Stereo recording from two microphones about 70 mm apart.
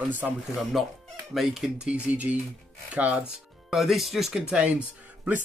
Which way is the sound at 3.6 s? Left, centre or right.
Centre.